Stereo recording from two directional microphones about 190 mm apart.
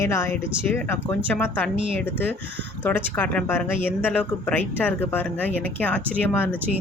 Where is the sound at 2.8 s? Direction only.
10° left (ahead or behind).